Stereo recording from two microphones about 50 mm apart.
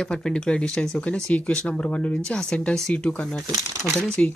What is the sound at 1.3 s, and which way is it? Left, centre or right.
Speech, left.